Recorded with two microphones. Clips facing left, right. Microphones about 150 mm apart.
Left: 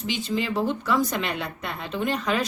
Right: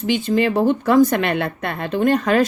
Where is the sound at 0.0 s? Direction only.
50° right (ahead or behind).